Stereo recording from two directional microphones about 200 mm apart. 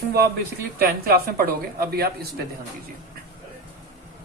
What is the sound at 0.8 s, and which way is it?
A woman's voice, 50° right (ahead or behind).